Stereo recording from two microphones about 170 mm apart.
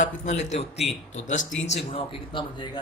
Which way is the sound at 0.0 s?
45° left (ahead or behind).